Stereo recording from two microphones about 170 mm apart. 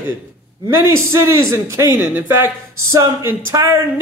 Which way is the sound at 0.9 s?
15° right (ahead or behind).